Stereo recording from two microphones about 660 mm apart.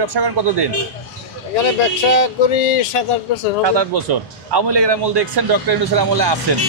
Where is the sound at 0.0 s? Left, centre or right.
Right.